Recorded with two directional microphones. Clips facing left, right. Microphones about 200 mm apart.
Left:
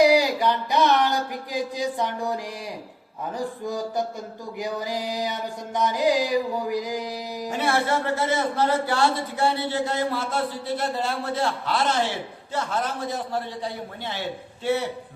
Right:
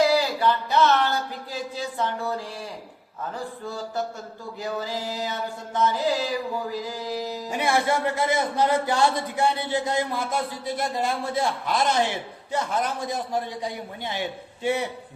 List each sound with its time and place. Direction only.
0.0 s a sound: 15° left (ahead or behind)
3.3 s music: 15° left (ahead or behind)
7.5 s a man's voice: 15° right (ahead or behind)